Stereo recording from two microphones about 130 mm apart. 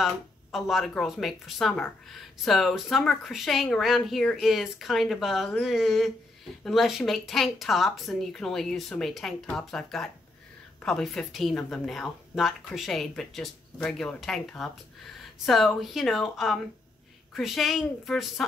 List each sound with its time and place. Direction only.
0.0 s speech: centre (ahead or behind)